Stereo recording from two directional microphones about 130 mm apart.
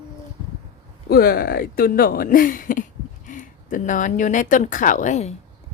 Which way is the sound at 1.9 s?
90° left.